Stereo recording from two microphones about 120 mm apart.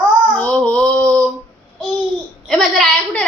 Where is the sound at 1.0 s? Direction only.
25° right (ahead or behind).